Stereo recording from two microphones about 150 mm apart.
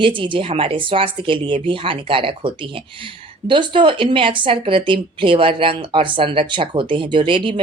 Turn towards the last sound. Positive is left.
turn(degrees=-35)  # may be behind; listen again after turning